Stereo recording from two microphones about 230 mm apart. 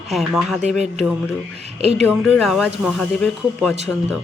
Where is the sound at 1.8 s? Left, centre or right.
Right.